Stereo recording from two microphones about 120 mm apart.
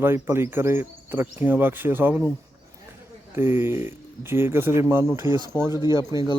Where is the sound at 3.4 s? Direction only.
20° right (ahead or behind).